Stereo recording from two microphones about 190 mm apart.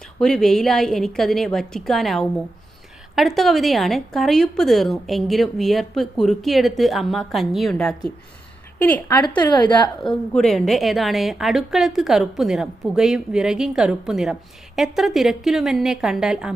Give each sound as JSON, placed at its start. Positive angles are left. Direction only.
{"t": 0.2, "sound": "a woman's voice", "side_deg": 5}
{"t": 9.6, "sound": "a woman's voice", "side_deg": 25}
{"t": 10.0, "sound": "a woman's voice", "side_deg": 5}